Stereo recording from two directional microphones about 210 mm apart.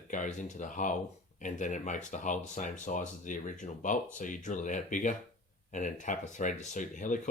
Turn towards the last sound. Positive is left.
turn(degrees=35)  # may be behind; listen again after turning